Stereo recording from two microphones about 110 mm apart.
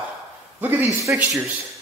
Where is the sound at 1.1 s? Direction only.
20° right (ahead or behind).